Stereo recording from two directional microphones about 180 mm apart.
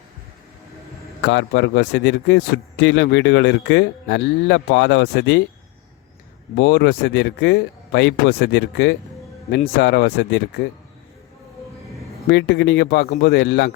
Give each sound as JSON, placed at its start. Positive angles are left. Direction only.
{"t": 1.2, "sound": "a man's voice", "side_deg": 75}
{"t": 6.6, "sound": "a man's voice", "side_deg": 65}
{"t": 12.3, "sound": "a man's voice", "side_deg": 75}